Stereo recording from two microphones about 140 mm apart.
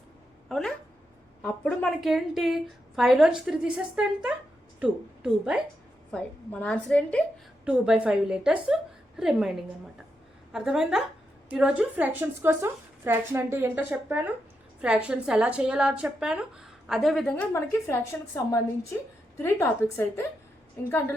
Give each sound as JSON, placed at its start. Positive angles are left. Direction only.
{"t": 0.4, "sound": "a woman's voice", "side_deg": 0}
{"t": 6.1, "sound": "a woman's voice", "side_deg": 10}
{"t": 7.6, "sound": "a woman's voice", "side_deg": -5}
{"t": 17.5, "sound": "a woman's voice", "side_deg": 20}
{"t": 19.4, "sound": "a woman's voice", "side_deg": 15}